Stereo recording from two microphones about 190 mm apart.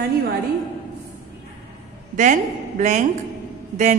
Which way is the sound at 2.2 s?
40° right (ahead or behind).